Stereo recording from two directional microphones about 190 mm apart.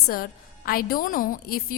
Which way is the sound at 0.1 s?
50° left (ahead or behind).